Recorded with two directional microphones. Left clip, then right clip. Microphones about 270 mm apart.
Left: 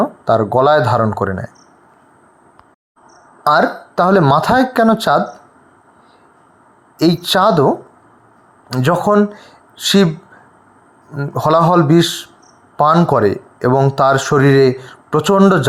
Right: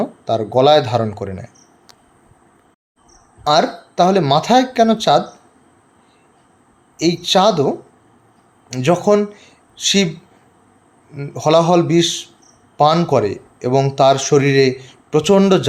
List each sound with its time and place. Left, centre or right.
0.0 s speech: centre
3.9 s speech: centre
6.9 s speech: centre
8.7 s speech: centre
9.4 s a sound: centre
11.1 s speech: centre